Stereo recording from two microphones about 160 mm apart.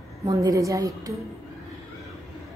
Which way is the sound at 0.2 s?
20° right (ahead or behind).